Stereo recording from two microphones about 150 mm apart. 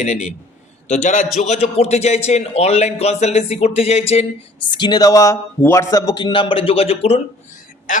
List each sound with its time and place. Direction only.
0.0 s speech: 55° left (ahead or behind)
4.7 s a man's voice: 30° left (ahead or behind)